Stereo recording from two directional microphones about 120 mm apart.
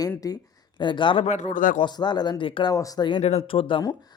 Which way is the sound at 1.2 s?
85° left.